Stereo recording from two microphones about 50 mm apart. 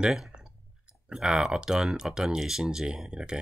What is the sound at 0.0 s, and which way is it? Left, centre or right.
Speech, centre.